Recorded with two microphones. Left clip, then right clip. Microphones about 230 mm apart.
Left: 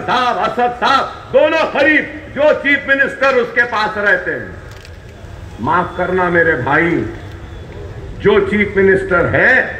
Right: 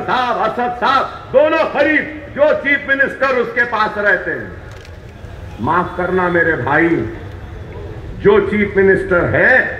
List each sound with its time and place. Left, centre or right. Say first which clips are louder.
0.0 s a man's voice: left 1 dB; left
5.7 s a man's voice: left 1 dB; left
8.2 s a man's voice: even; left